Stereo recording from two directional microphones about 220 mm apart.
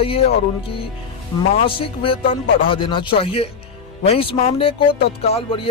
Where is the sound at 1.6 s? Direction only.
25° left (ahead or behind).